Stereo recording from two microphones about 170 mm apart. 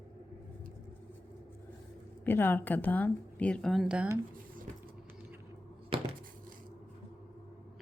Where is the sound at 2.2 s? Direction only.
10° left (ahead or behind); by 4.1 s 5° right (ahead or behind).